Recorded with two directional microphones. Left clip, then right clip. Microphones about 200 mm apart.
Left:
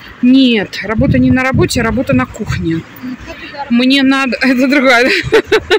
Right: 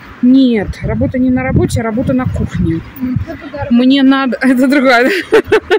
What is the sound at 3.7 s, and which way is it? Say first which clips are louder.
Speech: right 1 dB; 15° right (ahead or behind).